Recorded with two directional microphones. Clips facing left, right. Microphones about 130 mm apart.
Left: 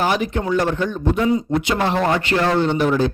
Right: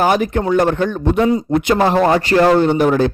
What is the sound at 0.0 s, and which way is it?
A man's voice, 45° right (ahead or behind).